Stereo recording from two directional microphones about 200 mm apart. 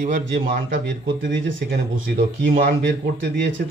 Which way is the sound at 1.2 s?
70° right (ahead or behind).